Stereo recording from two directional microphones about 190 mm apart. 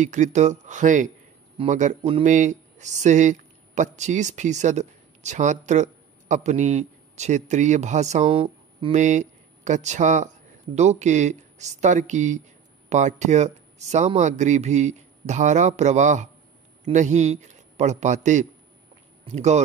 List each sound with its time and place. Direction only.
0.0 s speech: 40° right (ahead or behind)